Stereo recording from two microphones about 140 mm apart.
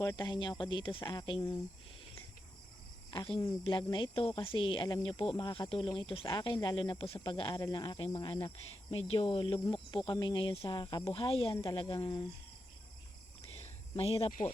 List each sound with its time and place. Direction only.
0.0 s speech: 30° left (ahead or behind)
3.1 s speech: 35° left (ahead or behind)
13.9 s speech: 45° left (ahead or behind)